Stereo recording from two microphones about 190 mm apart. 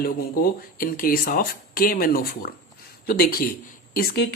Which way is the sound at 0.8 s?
50° left (ahead or behind).